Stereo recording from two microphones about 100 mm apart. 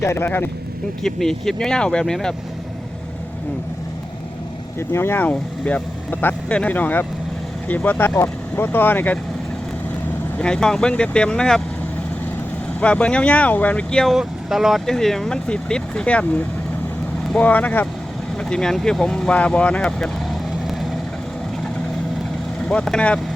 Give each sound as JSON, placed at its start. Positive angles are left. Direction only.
{"t": 0.0, "sound": "speech", "side_deg": 25}
{"t": 1.0, "sound": "speech", "side_deg": 5}
{"t": 4.8, "sound": "speech", "side_deg": 25}
{"t": 10.3, "sound": "speech", "side_deg": 10}
{"t": 12.8, "sound": "speech", "side_deg": 10}
{"t": 14.2, "sound": "speech", "side_deg": -5}
{"t": 22.7, "sound": "speech", "side_deg": 10}